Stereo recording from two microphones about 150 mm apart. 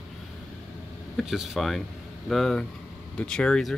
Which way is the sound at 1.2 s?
Centre (ahead or behind).